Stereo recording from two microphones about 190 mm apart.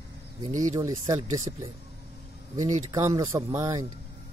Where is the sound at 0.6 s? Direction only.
20° right (ahead or behind).